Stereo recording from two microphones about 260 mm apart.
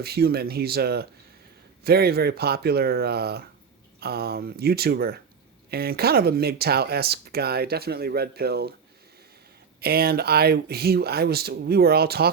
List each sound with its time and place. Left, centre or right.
0.0 s speech: right
9.8 s speech: right